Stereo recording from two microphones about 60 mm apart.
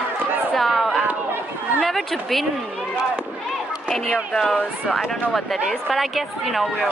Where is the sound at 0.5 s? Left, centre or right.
Centre.